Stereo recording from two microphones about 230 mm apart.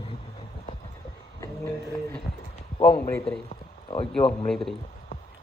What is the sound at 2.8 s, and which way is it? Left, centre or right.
Speech, left.